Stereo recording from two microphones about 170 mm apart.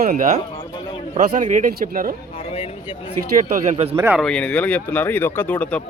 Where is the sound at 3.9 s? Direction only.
15° right (ahead or behind).